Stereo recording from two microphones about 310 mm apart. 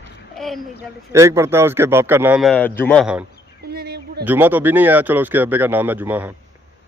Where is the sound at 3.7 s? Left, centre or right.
Right.